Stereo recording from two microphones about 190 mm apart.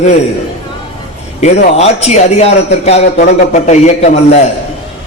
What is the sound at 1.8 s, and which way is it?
A man's voice, 35° left (ahead or behind).